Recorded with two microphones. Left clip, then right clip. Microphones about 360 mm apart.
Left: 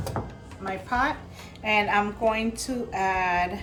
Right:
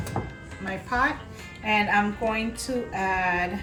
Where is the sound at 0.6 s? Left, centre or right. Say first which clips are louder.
Right 1 dB; centre.